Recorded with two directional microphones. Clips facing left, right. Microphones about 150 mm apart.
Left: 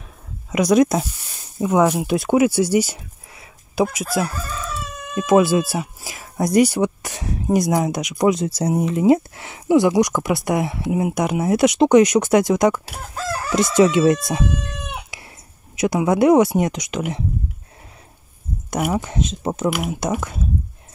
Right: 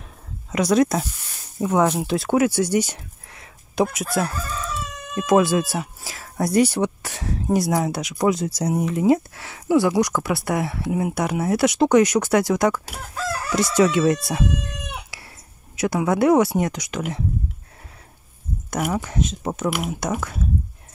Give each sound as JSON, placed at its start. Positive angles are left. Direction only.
{"t": 0.5, "sound": "speech", "side_deg": 15}
{"t": 15.1, "sound": "a sound", "side_deg": 20}
{"t": 15.7, "sound": "speech", "side_deg": 20}
{"t": 18.8, "sound": "speech", "side_deg": 20}